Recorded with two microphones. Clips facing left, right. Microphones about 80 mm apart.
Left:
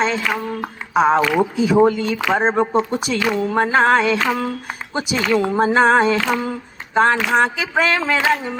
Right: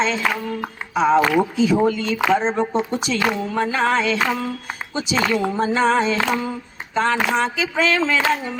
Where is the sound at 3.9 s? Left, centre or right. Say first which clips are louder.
Left 3 dB; left.